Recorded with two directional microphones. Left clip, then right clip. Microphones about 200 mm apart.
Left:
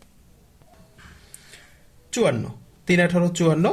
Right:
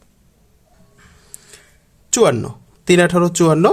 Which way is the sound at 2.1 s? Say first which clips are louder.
Right 8 dB; 35° right (ahead or behind).